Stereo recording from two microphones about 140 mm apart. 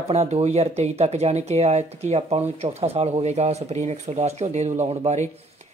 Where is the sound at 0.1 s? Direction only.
50° right (ahead or behind).